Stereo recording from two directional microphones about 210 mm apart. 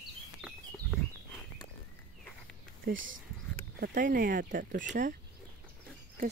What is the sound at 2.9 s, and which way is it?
Speech, 65° right (ahead or behind).